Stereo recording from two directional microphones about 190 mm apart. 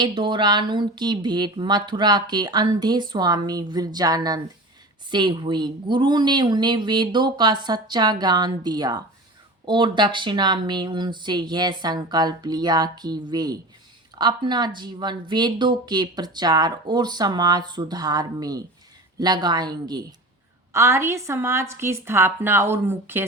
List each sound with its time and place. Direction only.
0.0 s a woman's voice: 25° right (ahead or behind)